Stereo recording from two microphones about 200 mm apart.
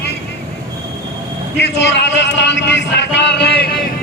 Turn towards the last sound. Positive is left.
turn(degrees=55)  # may be behind; listen again after turning